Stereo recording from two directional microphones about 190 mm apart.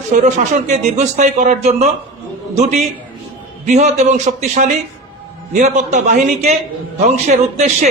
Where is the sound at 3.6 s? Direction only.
40° right (ahead or behind).